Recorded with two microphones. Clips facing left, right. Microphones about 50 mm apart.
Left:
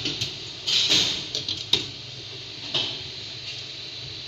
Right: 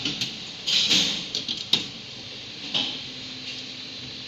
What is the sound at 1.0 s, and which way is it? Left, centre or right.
Thump, right.